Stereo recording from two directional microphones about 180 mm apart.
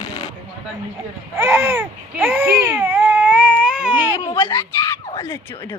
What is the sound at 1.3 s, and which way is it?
Baby cry, 15° right (ahead or behind).